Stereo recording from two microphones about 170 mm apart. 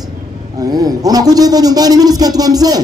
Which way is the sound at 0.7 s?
20° right (ahead or behind).